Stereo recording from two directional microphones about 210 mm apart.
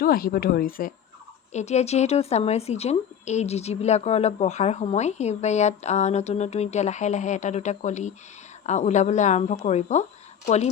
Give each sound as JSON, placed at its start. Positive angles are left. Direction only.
{"t": 0.0, "sound": "speech", "side_deg": 45}
{"t": 1.5, "sound": "a woman's voice", "side_deg": 30}